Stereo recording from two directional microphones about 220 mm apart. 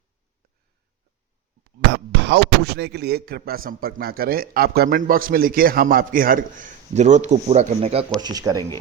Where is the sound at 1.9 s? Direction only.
50° right (ahead or behind); by 8.6 s 15° right (ahead or behind).